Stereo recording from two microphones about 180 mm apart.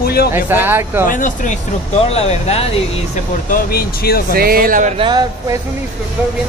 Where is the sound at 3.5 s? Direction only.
55° left (ahead or behind).